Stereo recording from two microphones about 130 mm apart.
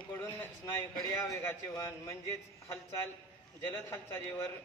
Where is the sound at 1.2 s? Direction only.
20° left (ahead or behind).